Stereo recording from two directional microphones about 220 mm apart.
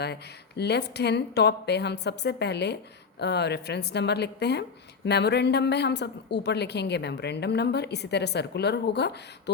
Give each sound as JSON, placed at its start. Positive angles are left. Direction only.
{"t": 0.0, "sound": "a woman's voice", "side_deg": 50}